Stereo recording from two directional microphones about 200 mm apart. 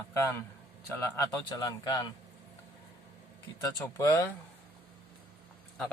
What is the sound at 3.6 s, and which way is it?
Speech, 15° left (ahead or behind).